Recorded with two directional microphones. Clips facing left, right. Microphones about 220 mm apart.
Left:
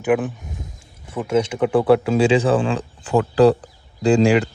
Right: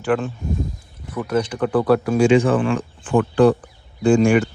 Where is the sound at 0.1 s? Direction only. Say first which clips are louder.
Left 1 dB; 15° left (ahead or behind).